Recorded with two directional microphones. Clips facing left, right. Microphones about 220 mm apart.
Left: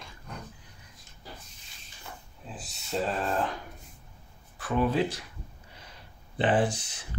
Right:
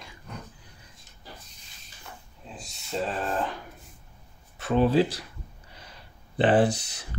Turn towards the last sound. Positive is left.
turn(degrees=-40)  # may be behind; listen again after turning